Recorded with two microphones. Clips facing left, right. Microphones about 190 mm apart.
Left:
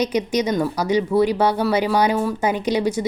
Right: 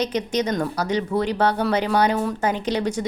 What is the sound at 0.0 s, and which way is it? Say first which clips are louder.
A woman's voice: left 3 dB; 10° left (ahead or behind).